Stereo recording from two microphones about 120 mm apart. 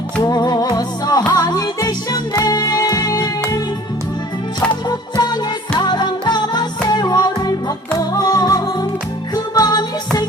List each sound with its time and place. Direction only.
0.2 s music: 35° left (ahead or behind)
4.9 s music: 35° left (ahead or behind)